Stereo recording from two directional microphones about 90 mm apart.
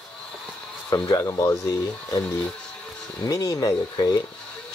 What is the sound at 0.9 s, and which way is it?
Speech, 60° left (ahead or behind).